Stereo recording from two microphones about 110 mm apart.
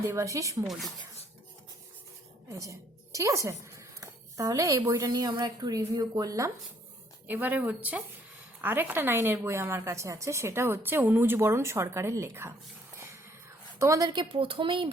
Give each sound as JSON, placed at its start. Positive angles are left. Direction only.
{"t": 0.0, "sound": "a woman's voice", "side_deg": -25}
{"t": 0.6, "sound": "speech", "side_deg": 0}
{"t": 2.5, "sound": "a woman's voice", "side_deg": -30}
{"t": 7.3, "sound": "a woman's voice", "side_deg": -15}
{"t": 13.7, "sound": "a woman's voice", "side_deg": -30}
{"t": 14.2, "sound": "speech", "side_deg": -55}